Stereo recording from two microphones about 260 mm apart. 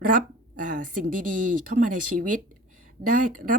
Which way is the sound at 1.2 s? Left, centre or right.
Right.